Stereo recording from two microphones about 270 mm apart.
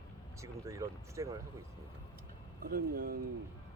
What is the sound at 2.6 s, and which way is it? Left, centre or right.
Speech, right.